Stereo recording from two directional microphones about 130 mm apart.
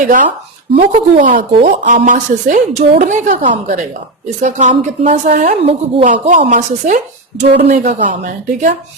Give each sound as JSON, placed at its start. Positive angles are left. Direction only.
{"t": 0.0, "sound": "a woman's voice", "side_deg": -90}
{"t": 0.8, "sound": "a woman's voice", "side_deg": -60}
{"t": 2.9, "sound": "speech", "side_deg": -65}
{"t": 3.4, "sound": "a woman's voice", "side_deg": -80}
{"t": 4.4, "sound": "a woman's voice", "side_deg": -65}
{"t": 6.1, "sound": "a woman's voice", "side_deg": -75}
{"t": 8.0, "sound": "a woman's voice", "side_deg": -85}